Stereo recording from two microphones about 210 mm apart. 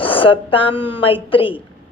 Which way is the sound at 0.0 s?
25° left (ahead or behind).